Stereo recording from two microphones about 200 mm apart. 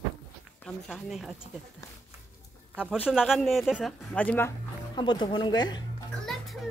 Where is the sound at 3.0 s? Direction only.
5° right (ahead or behind).